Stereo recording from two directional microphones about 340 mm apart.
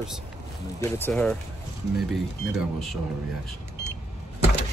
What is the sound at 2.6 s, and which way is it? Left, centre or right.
Speech, centre.